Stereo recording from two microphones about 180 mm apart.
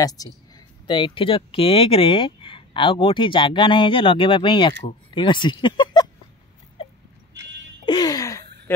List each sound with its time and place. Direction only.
0.2 s speech: 20° left (ahead or behind)
7.8 s a sound: 25° left (ahead or behind)
8.7 s jingle bell: 15° left (ahead or behind)